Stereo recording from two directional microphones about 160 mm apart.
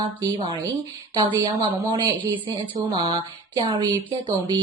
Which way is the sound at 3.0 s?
25° right (ahead or behind).